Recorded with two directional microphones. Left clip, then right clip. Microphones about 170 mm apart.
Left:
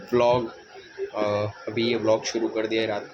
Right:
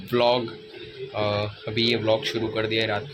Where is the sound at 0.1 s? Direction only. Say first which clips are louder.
Even; 15° left (ahead or behind).